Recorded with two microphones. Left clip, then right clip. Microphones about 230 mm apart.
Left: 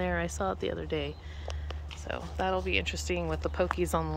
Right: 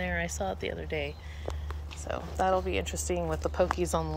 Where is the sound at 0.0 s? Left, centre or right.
Left.